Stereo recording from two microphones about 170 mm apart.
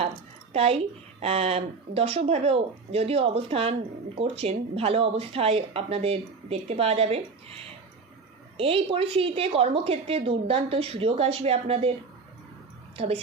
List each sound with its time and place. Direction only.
0.5 s speech: 35° right (ahead or behind)
8.5 s speech: 35° right (ahead or behind)
13.0 s speech: 35° right (ahead or behind)